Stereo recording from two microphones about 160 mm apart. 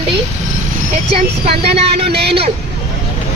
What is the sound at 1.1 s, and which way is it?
Speech, 40° right (ahead or behind).